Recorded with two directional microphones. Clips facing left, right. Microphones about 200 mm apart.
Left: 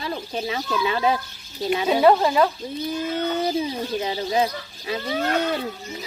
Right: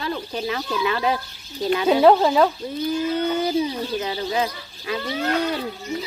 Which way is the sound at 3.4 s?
30° left (ahead or behind).